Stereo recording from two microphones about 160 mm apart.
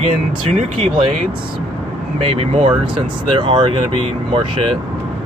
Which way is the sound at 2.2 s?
40° right (ahead or behind).